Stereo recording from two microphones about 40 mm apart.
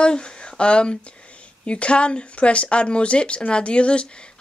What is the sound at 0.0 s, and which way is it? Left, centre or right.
Speech, left.